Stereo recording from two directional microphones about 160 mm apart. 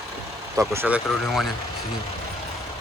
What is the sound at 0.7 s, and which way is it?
Speech, 10° right (ahead or behind).